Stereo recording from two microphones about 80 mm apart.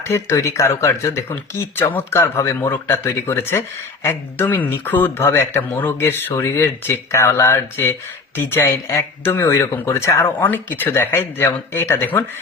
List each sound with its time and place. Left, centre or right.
0.0 s a man's voice: left